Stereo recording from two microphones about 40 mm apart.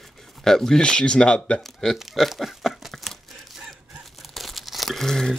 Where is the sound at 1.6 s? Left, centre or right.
Centre.